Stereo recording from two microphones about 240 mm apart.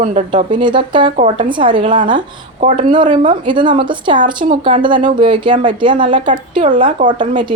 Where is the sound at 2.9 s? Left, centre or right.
Centre.